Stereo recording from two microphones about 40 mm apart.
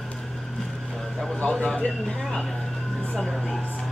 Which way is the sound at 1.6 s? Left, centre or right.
Left.